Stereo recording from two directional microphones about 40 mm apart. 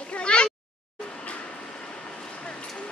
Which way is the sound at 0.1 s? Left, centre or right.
Left.